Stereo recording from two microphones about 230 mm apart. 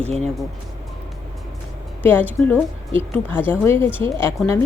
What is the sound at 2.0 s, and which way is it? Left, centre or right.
A woman's voice, centre.